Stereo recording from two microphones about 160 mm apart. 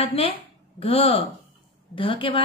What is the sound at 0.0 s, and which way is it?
A woman's voice, 35° left (ahead or behind).